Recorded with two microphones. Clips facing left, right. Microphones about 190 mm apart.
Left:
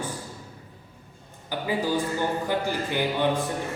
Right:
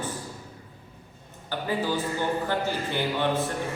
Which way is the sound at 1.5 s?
10° left (ahead or behind).